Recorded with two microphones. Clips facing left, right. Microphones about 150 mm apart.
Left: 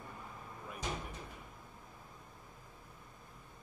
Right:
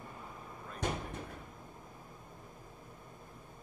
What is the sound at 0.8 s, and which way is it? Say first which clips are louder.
Cupboard open or close: right 5 dB; 55° right (ahead or behind).